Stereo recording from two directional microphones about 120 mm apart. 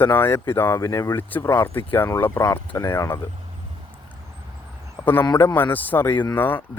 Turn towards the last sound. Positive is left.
turn(degrees=15)  # may be behind; listen again after turning